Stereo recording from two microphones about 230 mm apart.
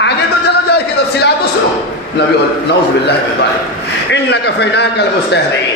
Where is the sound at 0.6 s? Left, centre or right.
Left.